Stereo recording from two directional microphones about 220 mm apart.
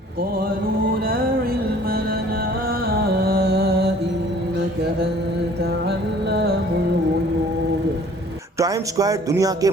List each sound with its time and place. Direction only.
3.0 s music: 45° right (ahead or behind)
6.3 s music: 50° right (ahead or behind)
8.5 s speech: 15° right (ahead or behind)